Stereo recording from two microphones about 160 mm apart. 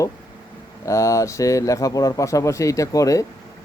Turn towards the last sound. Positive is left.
turn(degrees=20)  # may be behind; listen again after turning